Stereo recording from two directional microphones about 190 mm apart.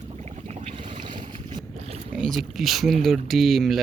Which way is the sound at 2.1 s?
Centre (ahead or behind).